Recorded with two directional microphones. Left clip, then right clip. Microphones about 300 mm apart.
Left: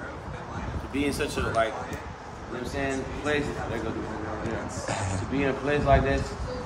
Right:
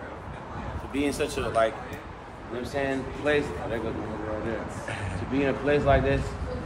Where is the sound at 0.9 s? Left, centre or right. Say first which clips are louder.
Right 1 dB; centre.